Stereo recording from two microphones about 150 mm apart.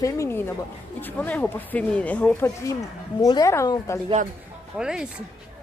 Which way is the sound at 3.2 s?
25° left (ahead or behind).